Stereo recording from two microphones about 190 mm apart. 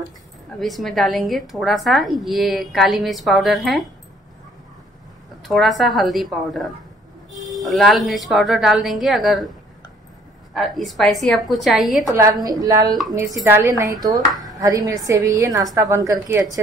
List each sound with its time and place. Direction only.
0.6 s a woman's voice: centre (ahead or behind)
5.5 s a woman's voice: centre (ahead or behind)
10.5 s a woman's voice: centre (ahead or behind)
12.2 s a woman's voice: 20° right (ahead or behind)
14.4 s a sound: 20° right (ahead or behind)
15.0 s a woman's voice: 15° right (ahead or behind)